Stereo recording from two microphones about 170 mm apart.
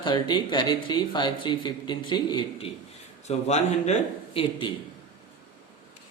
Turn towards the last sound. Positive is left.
turn(degrees=30)  # may be behind; listen again after turning